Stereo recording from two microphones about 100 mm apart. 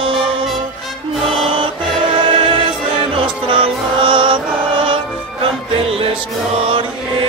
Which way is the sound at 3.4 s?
60° right (ahead or behind).